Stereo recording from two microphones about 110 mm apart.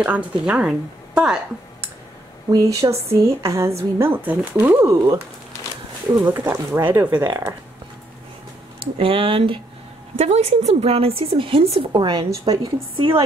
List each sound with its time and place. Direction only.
0.0 s a woman's voice: 15° right (ahead or behind)
2.5 s a woman's voice: 30° right (ahead or behind)
6.1 s a woman's voice: 20° right (ahead or behind)
8.9 s speech: 55° right (ahead or behind)
10.1 s speech: 80° right; by 13.1 s 45° right (ahead or behind)